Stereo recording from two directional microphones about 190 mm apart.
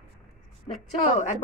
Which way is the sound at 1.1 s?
35° left (ahead or behind).